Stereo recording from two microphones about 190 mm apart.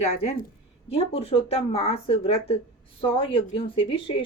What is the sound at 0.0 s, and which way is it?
A woman's voice, 30° left (ahead or behind).